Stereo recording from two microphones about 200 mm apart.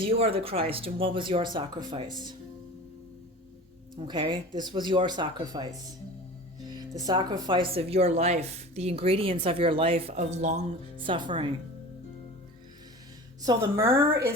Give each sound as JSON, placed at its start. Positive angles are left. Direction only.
{"t": 0.0, "sound": "speech", "side_deg": -30}
{"t": 3.9, "sound": "speech", "side_deg": -25}
{"t": 6.7, "sound": "speech", "side_deg": -20}
{"t": 13.4, "sound": "a woman's voice", "side_deg": -15}